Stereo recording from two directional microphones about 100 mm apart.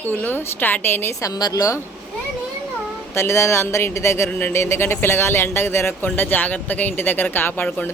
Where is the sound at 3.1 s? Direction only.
30° left (ahead or behind).